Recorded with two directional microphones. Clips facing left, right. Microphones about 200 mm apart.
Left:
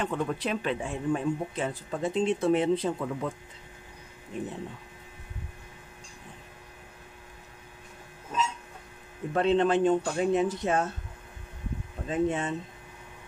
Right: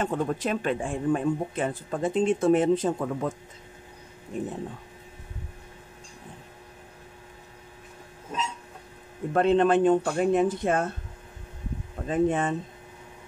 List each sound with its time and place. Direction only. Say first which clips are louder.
0.0 s speech: right 3 dB; 45° right (ahead or behind)
9.3 s speech: right 3 dB; 50° right (ahead or behind)
12.1 s speech: right 4 dB; 50° right (ahead or behind)